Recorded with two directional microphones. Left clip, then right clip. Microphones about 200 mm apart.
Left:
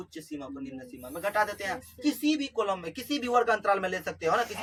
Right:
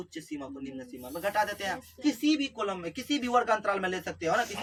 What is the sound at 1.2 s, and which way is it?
A man's voice, 5° right (ahead or behind).